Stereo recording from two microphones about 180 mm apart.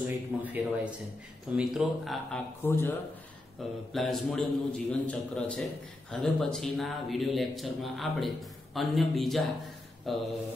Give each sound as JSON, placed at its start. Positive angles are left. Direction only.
{"t": 0.0, "sound": "a man's voice", "side_deg": -10}
{"t": 2.6, "sound": "speech", "side_deg": 10}
{"t": 3.6, "sound": "a man's voice", "side_deg": 0}